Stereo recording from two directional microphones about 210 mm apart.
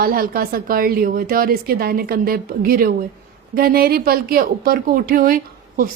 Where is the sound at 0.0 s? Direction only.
45° right (ahead or behind).